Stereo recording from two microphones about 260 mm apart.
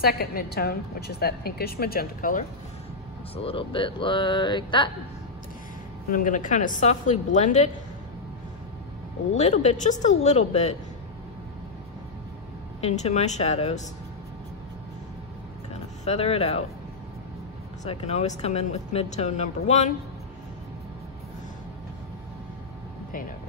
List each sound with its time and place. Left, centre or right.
0.0 s a woman's voice: left
3.3 s speech: left
6.0 s speech: left
9.3 s speech: left
12.8 s speech: left
16.1 s speech: left
17.8 s speech: left